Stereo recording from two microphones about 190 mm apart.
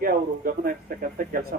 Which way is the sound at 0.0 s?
50° right (ahead or behind).